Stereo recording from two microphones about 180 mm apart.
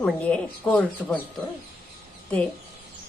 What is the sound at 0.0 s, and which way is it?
Speech, 5° left (ahead or behind).